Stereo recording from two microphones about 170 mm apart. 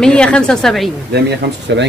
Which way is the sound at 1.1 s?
80° right.